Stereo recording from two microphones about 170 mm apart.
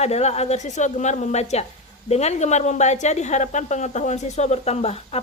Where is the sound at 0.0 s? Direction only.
40° left (ahead or behind).